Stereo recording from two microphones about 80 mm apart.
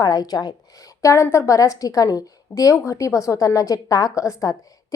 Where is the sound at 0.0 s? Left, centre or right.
Left.